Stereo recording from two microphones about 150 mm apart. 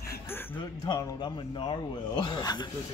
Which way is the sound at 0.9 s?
30° left (ahead or behind).